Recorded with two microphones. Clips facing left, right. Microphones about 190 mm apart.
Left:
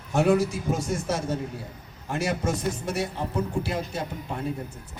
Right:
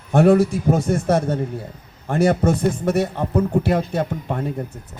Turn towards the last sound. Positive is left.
turn(degrees=-60)  # may be behind; listen again after turning